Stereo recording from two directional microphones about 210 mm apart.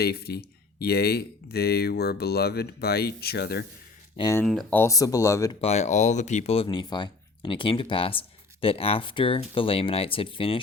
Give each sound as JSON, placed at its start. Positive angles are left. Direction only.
{"t": 0.0, "sound": "speech", "side_deg": 50}
{"t": 4.2, "sound": "speech", "side_deg": 15}
{"t": 5.5, "sound": "speech", "side_deg": 30}